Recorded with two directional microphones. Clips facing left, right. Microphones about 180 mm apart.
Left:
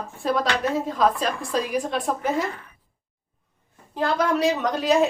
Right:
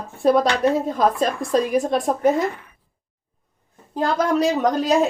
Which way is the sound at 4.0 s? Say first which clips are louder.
Right 2 dB; 40° right (ahead or behind).